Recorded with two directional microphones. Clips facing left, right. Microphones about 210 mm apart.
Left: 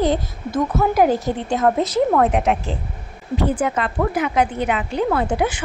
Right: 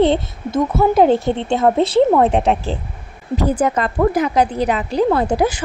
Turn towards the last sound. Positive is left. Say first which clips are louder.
# right 4 dB
turn(degrees=-40)  # may be behind; listen again after turning